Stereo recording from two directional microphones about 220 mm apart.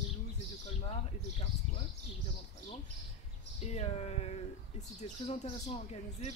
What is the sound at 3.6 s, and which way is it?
Speech, 30° left (ahead or behind).